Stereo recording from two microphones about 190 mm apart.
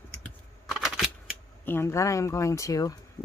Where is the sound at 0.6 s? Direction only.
Centre (ahead or behind).